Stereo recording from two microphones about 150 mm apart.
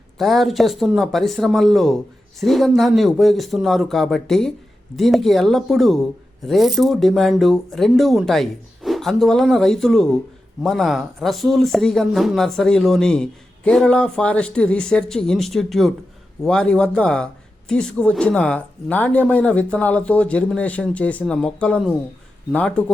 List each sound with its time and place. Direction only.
0.2 s a woman's voice: centre (ahead or behind)